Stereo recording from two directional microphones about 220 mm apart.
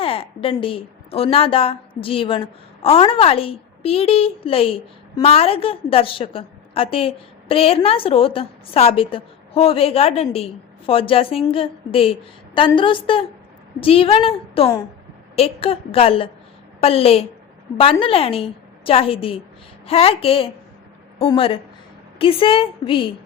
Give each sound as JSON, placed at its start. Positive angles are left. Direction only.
{"t": 0.0, "sound": "a woman's voice", "side_deg": 25}